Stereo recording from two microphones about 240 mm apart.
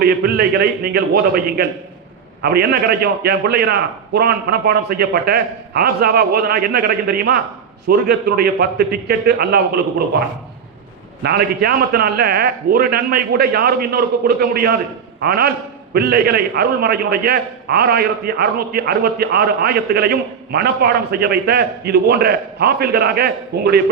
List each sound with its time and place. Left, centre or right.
0.0 s a man's voice: right
11.2 s a man's voice: right